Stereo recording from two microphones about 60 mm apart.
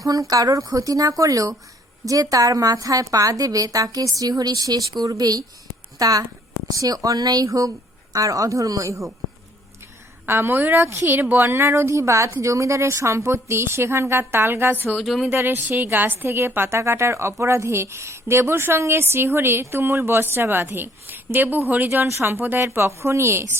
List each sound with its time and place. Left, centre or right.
0.0 s a woman's voice: right
6.0 s speech: right
10.2 s a woman's voice: right
11.2 s speech: right
14.9 s speech: centre
15.3 s a woman's voice: right
22.0 s a woman's voice: right
22.6 s speech: right